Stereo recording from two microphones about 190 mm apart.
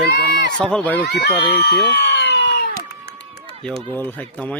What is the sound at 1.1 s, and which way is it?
Speech, 60° left (ahead or behind).